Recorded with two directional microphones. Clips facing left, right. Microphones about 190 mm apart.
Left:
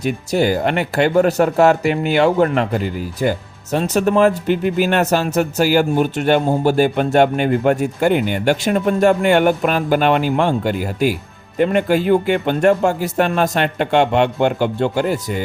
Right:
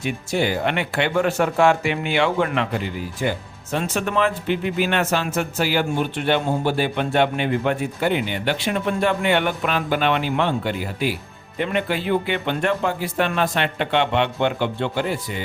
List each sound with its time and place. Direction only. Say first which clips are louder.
0.0 s speech: left 5 dB; 40° left (ahead or behind)